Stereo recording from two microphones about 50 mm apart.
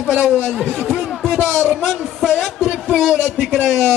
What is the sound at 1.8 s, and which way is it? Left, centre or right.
Speech, centre.